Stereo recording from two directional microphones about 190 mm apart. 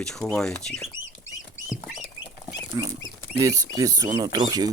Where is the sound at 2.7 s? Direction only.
20° right (ahead or behind).